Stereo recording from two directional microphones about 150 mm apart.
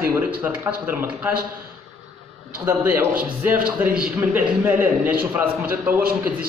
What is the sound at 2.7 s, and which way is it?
A man's voice, 15° right (ahead or behind).